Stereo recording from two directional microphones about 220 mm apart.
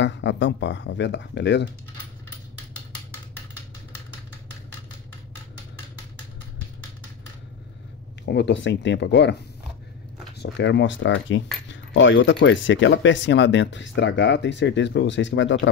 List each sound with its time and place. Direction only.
0.0 s speech: 55° left (ahead or behind)
8.3 s speech: 50° left (ahead or behind)
10.4 s speech: 50° left (ahead or behind)